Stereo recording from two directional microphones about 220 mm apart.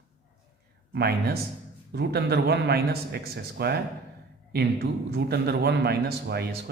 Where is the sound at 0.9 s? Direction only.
45° right (ahead or behind).